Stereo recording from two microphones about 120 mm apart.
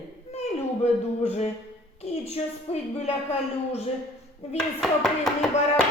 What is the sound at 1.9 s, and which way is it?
Speech, 55° left (ahead or behind).